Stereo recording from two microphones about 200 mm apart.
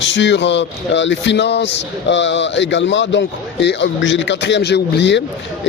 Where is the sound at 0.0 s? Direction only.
65° left (ahead or behind).